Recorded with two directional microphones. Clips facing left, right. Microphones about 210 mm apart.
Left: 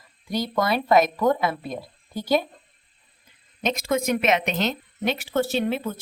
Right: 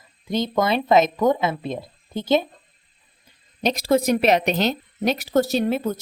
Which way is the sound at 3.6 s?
35° right (ahead or behind).